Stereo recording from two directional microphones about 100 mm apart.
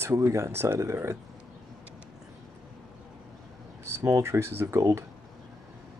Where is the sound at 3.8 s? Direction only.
30° right (ahead or behind).